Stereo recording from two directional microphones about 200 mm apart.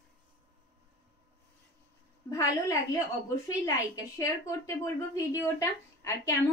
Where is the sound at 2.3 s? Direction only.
20° left (ahead or behind).